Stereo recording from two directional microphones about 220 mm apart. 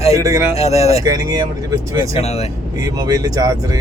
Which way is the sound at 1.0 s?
15° right (ahead or behind).